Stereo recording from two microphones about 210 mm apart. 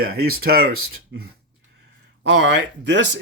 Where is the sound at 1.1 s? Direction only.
60° right (ahead or behind).